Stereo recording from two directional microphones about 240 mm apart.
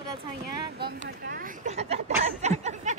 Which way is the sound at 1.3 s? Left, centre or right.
Right.